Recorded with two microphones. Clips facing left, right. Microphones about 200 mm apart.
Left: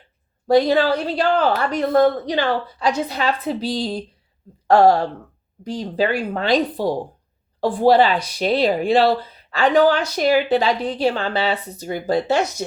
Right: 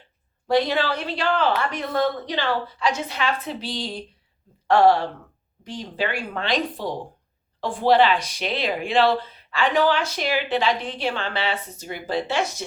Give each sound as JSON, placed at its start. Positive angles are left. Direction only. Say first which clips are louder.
{"t": 0.4, "sound": "speech", "louder": "left 6 dB", "side_deg": 40}